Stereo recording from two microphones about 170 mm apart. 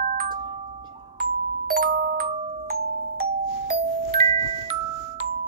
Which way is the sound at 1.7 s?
55° right (ahead or behind).